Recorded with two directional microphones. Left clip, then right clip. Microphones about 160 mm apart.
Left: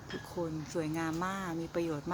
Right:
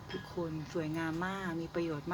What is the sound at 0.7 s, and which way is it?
Speech, 25° left (ahead or behind).